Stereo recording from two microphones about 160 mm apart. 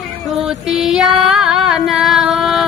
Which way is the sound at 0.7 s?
5° right (ahead or behind).